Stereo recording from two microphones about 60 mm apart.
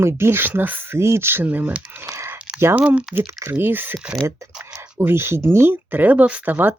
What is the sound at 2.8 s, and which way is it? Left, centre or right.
Speech, right.